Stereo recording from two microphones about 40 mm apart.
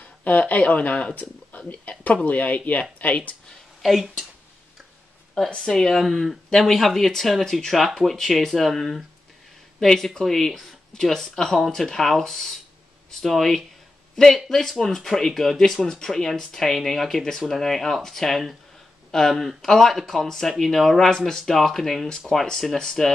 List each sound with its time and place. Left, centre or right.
0.0 s speech: left
3.8 s speech: centre
5.4 s speech: centre